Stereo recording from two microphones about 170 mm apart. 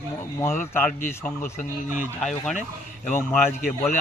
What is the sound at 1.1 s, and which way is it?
Speech, 15° left (ahead or behind).